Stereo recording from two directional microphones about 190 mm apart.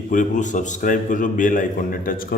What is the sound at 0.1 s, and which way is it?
A man's voice, 40° left (ahead or behind).